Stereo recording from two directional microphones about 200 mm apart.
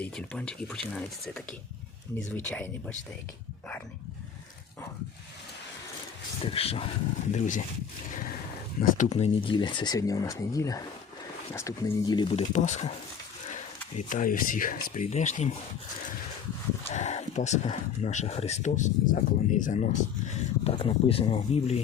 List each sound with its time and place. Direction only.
0.0 s speech: 5° left (ahead or behind)
6.4 s speech: 30° left (ahead or behind)
7.3 s speech: 40° left (ahead or behind)
8.8 s speech: 35° left (ahead or behind)
14.1 s speech: 40° left (ahead or behind)
16.8 s speech: 35° left (ahead or behind)